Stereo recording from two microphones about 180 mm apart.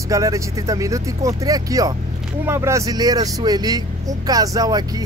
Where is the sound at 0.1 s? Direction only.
20° right (ahead or behind).